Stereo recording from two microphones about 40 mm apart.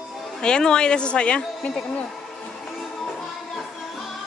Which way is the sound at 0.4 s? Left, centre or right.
Left.